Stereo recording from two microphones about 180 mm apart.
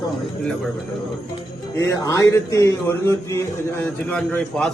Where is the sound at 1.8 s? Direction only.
20° left (ahead or behind).